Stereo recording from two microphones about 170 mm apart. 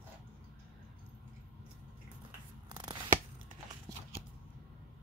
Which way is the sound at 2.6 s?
25° right (ahead or behind).